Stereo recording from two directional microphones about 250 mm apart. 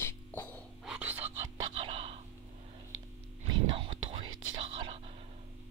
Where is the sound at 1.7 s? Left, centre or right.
Right.